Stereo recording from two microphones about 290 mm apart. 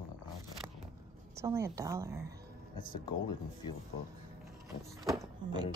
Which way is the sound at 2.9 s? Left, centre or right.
Centre.